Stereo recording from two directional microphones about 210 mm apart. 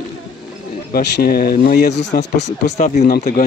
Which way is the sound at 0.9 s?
45° left (ahead or behind).